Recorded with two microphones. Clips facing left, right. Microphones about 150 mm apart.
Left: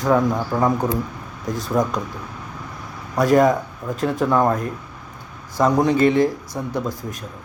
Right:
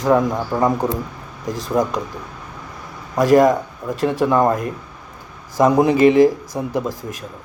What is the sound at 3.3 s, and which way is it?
Speech, centre (ahead or behind).